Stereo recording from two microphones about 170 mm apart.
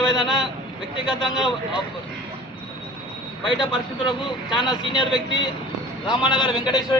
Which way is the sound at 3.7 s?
30° left (ahead or behind).